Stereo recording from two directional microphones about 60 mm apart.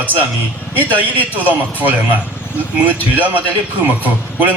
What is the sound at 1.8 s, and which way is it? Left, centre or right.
A man's voice, right.